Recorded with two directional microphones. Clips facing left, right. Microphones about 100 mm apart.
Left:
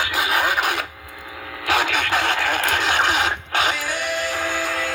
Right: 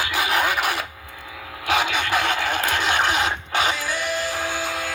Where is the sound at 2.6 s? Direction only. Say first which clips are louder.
Even; 5° right (ahead or behind).